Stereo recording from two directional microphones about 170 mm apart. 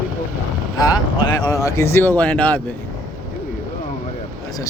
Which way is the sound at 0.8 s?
25° left (ahead or behind).